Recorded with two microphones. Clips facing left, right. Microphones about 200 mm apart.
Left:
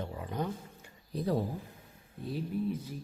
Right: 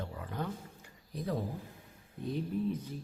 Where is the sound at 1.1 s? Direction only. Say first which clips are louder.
Left 5 dB; 35° left (ahead or behind).